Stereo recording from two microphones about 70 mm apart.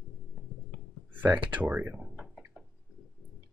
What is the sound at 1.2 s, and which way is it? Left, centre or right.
Speech, right.